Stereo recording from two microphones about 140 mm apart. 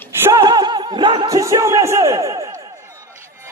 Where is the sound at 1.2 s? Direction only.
25° right (ahead or behind).